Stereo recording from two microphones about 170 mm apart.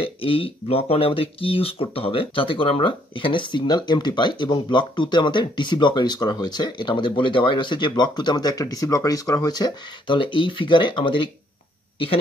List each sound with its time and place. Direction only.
0.0 s speech: 30° left (ahead or behind)